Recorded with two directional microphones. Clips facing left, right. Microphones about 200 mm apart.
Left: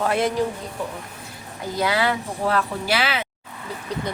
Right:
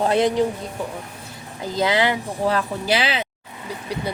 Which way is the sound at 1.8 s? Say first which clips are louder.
Right 2 dB; 20° right (ahead or behind).